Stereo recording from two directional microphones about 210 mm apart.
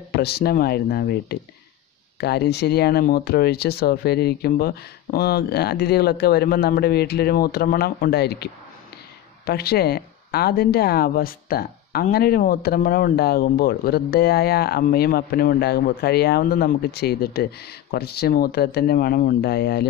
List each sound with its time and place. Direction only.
0.1 s speech: 50° left (ahead or behind)
9.5 s speech: 50° left (ahead or behind)